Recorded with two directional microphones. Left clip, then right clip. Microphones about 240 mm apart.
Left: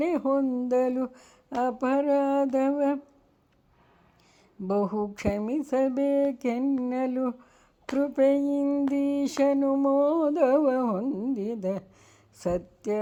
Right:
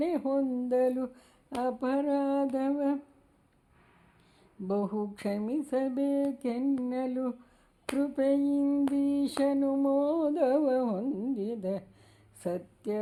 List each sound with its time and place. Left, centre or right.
0.0 s speech: left
4.7 s speech: left